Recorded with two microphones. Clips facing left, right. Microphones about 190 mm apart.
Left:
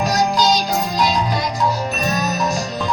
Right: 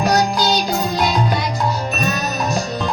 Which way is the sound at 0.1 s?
60° right (ahead or behind).